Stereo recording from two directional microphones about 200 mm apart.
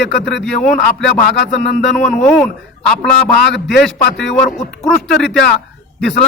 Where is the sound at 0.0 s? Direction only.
60° left (ahead or behind).